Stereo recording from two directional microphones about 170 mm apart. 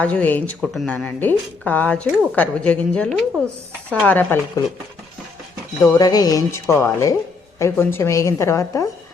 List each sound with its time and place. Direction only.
0.0 s speech: 10° left (ahead or behind)
5.8 s speech: 20° left (ahead or behind)